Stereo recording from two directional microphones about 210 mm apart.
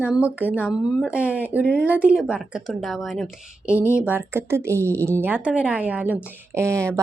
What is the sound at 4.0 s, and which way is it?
A woman's voice, 10° right (ahead or behind).